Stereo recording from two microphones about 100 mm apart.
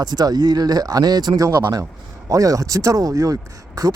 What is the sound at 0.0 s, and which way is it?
Speech, 40° right (ahead or behind).